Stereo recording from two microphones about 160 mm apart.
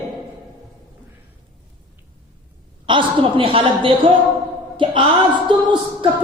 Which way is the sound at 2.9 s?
30° right (ahead or behind).